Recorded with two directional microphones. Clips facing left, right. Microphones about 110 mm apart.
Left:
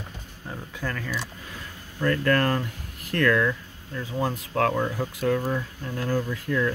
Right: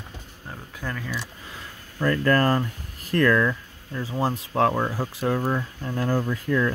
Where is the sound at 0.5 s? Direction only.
5° right (ahead or behind).